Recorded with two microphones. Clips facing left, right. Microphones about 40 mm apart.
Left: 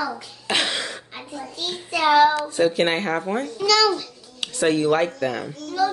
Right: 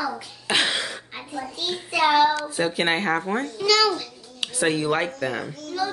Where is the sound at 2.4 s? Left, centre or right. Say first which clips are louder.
Left 4 dB; centre.